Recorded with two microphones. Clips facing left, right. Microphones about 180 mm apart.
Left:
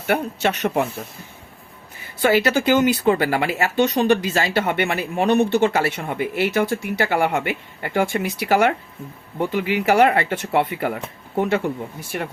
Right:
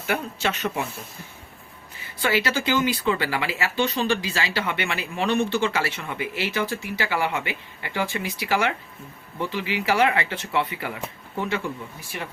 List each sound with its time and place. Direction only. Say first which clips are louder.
0.1 s speech: left 6 dB; 50° left (ahead or behind)
2.2 s speech: left 7 dB; 45° left (ahead or behind)
5.6 s speech: left 6 dB; 45° left (ahead or behind)